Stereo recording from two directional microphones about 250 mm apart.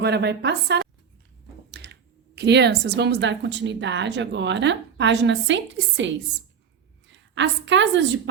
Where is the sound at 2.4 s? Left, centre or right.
Right.